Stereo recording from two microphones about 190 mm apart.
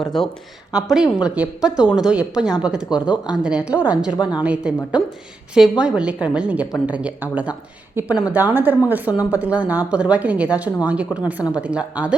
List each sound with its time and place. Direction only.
0.0 s speech: centre (ahead or behind)
4.2 s a woman's voice: 20° left (ahead or behind)
4.4 s a woman's voice: 5° right (ahead or behind)